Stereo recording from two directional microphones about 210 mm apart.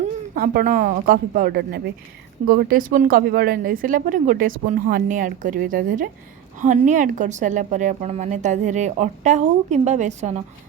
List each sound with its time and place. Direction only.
0.3 s a woman's voice: 40° right (ahead or behind)